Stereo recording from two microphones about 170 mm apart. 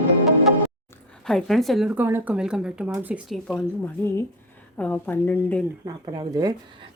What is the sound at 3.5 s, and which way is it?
A woman's voice, 10° left (ahead or behind).